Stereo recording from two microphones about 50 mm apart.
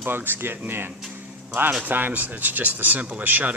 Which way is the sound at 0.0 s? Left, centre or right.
Right.